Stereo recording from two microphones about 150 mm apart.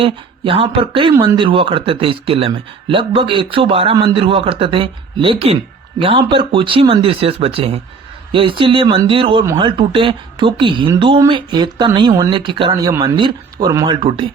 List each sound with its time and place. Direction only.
0.0 s a man's voice: 35° right (ahead or behind)
13.8 s a man's voice: 35° right (ahead or behind)